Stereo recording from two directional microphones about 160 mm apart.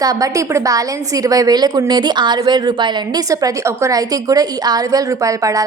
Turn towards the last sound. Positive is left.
turn(degrees=-20)  # may be behind; listen again after turning